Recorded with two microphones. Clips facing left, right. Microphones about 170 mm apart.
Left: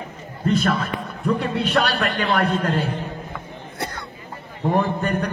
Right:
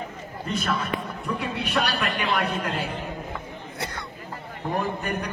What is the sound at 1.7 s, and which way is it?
A man's voice, 60° left (ahead or behind).